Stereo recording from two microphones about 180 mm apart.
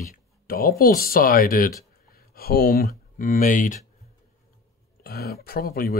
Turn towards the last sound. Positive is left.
turn(degrees=55)  # may be behind; listen again after turning